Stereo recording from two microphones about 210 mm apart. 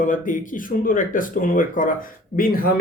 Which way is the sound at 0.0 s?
40° left (ahead or behind).